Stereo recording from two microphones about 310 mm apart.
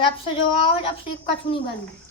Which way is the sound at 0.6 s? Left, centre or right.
Centre.